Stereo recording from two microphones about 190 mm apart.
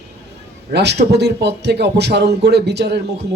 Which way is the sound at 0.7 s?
60° right (ahead or behind).